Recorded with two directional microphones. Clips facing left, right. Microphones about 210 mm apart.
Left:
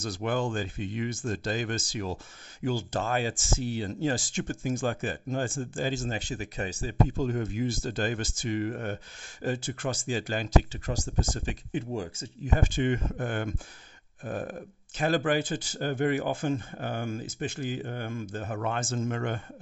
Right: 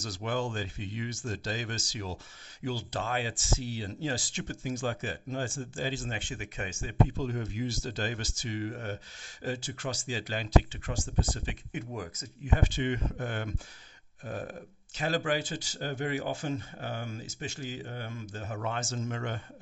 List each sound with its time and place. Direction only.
0.0 s speech: 55° left (ahead or behind)
11.7 s speech: 30° left (ahead or behind)
12.4 s speech: 45° left (ahead or behind)